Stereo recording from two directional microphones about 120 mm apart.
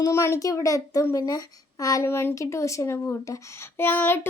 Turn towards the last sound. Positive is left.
turn(degrees=15)  # may be behind; listen again after turning